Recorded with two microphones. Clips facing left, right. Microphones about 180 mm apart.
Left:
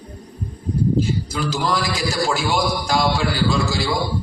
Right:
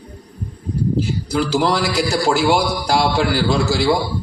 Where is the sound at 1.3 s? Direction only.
70° right (ahead or behind).